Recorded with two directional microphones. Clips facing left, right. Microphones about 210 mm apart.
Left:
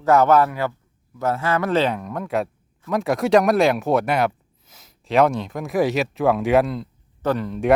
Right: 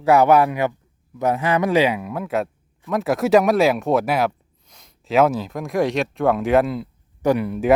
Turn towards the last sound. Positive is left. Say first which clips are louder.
# right 3 dB
turn(degrees=-10)  # may be behind; listen again after turning